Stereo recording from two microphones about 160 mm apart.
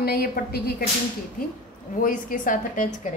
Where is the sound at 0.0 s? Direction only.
75° left (ahead or behind).